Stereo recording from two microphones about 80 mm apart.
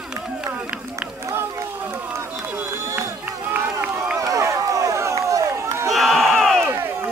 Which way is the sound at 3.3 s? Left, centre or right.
Centre.